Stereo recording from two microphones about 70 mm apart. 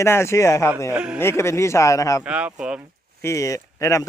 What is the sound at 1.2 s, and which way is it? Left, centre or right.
Speech, left.